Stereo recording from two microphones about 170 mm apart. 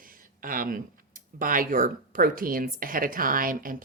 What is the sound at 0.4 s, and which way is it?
A woman's voice, 55° right (ahead or behind).